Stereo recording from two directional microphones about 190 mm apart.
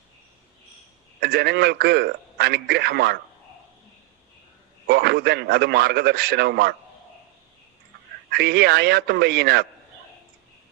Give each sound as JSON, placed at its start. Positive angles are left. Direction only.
{"t": 1.2, "sound": "a man's voice", "side_deg": -60}
{"t": 4.9, "sound": "a man's voice", "side_deg": -60}
{"t": 8.3, "sound": "a man's voice", "side_deg": -60}